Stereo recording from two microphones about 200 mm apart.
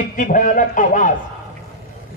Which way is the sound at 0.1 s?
40° left (ahead or behind).